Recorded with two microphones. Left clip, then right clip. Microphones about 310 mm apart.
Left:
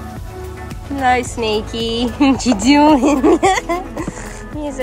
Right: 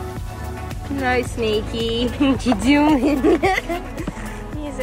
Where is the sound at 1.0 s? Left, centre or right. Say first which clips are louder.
Left 5 dB; centre.